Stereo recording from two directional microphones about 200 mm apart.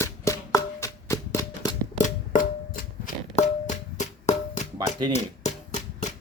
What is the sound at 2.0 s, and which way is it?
Music, 40° left (ahead or behind).